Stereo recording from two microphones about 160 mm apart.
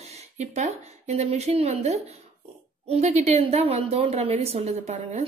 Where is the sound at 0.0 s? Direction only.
45° right (ahead or behind).